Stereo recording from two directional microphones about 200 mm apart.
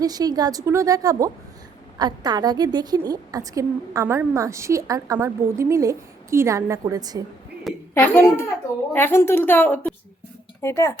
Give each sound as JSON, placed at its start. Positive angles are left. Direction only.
{"t": 0.0, "sound": "a woman's voice", "side_deg": -20}
{"t": 7.9, "sound": "a woman's voice", "side_deg": 10}